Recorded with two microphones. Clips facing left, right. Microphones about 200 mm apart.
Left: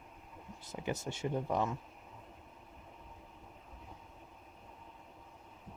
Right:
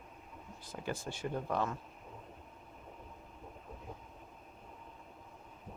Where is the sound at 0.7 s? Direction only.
20° left (ahead or behind).